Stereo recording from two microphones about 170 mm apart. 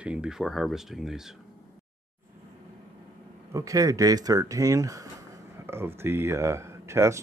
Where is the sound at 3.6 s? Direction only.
20° right (ahead or behind).